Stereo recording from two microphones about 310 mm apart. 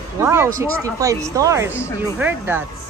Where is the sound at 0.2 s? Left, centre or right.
Centre.